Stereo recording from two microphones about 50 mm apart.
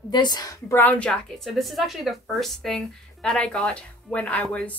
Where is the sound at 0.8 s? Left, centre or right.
Left.